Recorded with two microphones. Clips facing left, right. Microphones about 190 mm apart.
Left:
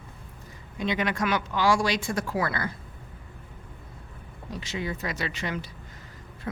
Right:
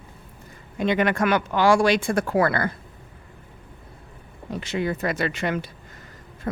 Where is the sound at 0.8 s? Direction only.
55° right (ahead or behind).